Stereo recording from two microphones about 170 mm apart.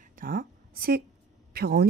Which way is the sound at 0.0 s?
55° right (ahead or behind).